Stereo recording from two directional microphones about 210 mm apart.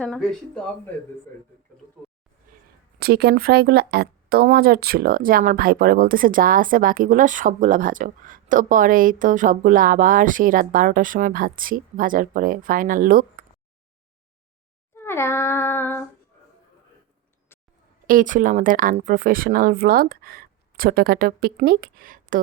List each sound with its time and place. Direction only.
0.0 s speech: centre (ahead or behind)
2.5 s a sound: 40° right (ahead or behind)
3.0 s speech: 50° right (ahead or behind)
14.9 s child singing: 10° left (ahead or behind)
17.5 s a sound: 10° left (ahead or behind)
18.0 s speech: 40° right (ahead or behind)